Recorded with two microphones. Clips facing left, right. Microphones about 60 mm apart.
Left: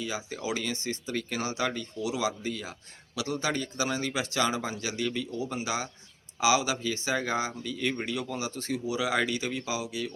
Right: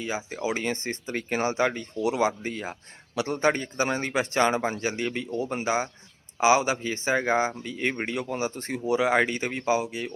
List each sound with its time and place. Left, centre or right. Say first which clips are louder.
0.0 s speech: right 4 dB; right
2.0 s speech: right 7 dB; right